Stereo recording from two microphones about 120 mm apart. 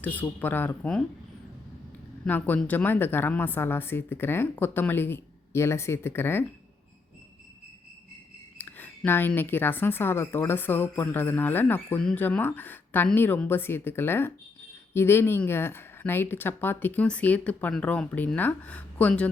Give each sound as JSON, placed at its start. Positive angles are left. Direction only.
{"t": 0.0, "sound": "speech", "side_deg": 15}
{"t": 2.2, "sound": "speech", "side_deg": 15}
{"t": 8.5, "sound": "speech", "side_deg": 15}